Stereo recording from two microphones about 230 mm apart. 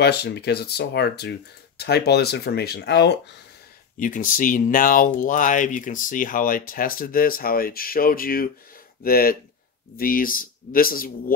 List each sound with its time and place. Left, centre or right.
0.0 s speech: left
4.0 s speech: left